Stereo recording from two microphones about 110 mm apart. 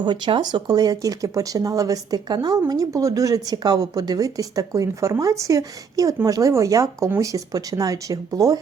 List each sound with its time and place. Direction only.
0.0 s speech: 45° right (ahead or behind)